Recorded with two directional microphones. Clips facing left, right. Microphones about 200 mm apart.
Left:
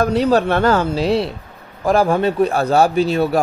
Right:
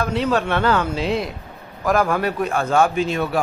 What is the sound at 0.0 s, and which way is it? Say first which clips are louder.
A man's voice: left 5 dB; 40° left (ahead or behind).